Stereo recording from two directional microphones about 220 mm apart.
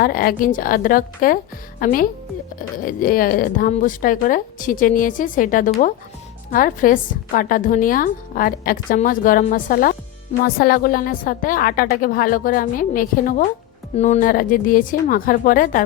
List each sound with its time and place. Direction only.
0.0 s a woman's voice: 40° left (ahead or behind)